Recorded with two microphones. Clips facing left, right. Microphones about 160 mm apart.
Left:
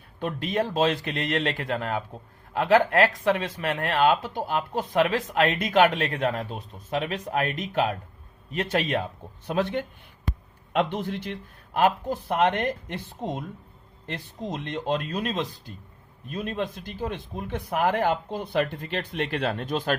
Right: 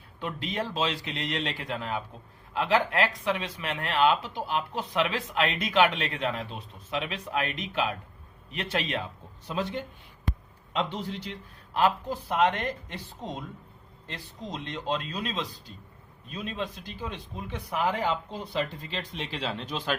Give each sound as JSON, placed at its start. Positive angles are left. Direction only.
{"t": 0.2, "sound": "speech", "side_deg": 50}
{"t": 9.5, "sound": "speech", "side_deg": 60}